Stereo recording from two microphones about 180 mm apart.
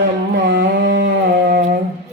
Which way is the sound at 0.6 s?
70° right (ahead or behind).